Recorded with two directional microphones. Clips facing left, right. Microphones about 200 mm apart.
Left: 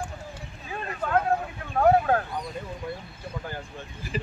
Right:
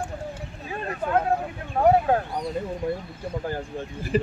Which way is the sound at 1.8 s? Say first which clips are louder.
Right 1 dB; 20° right (ahead or behind).